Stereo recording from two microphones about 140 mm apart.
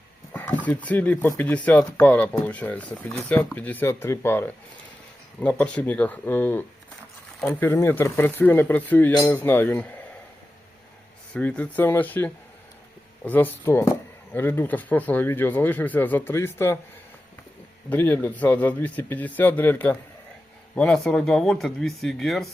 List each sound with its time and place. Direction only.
0.3 s speech: 10° left (ahead or behind)
11.3 s speech: 10° left (ahead or behind)
17.8 s speech: 15° left (ahead or behind)